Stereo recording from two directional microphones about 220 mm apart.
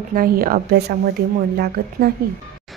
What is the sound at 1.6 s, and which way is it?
Speech, 45° right (ahead or behind).